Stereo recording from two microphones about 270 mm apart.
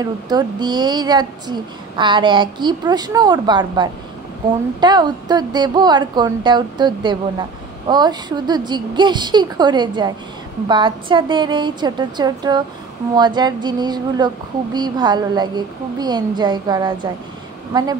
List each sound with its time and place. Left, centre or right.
0.0 s speech: centre